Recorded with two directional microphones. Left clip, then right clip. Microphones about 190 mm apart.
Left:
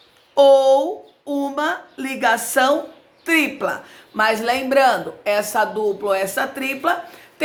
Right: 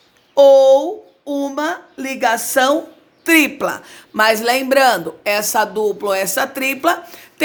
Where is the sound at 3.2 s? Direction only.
50° right (ahead or behind).